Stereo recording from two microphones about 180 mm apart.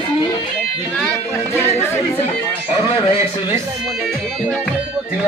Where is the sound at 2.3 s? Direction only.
25° left (ahead or behind).